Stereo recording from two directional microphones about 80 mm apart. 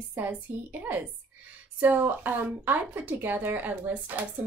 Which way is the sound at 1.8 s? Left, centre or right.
Right.